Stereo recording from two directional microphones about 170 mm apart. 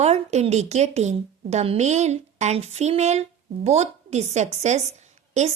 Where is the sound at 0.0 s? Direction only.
40° right (ahead or behind).